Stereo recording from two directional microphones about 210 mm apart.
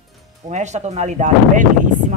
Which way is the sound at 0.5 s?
35° right (ahead or behind).